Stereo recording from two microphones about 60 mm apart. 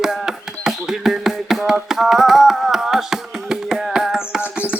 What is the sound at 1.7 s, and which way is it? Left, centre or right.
Music, centre.